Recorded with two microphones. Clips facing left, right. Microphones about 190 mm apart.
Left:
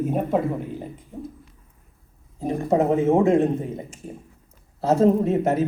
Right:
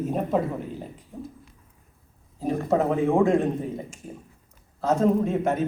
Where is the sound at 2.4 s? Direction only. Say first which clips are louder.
Left 2 dB; 20° left (ahead or behind).